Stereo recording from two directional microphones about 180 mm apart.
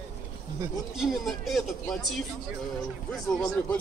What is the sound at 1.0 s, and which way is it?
Speech, centre (ahead or behind).